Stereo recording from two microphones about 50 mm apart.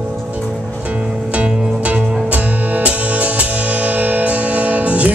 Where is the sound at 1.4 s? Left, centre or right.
Right.